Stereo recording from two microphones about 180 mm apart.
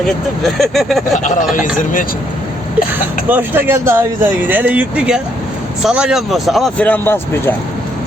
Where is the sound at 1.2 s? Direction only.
45° left (ahead or behind).